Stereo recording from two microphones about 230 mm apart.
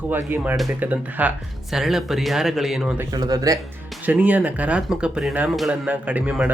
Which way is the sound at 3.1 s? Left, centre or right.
Centre.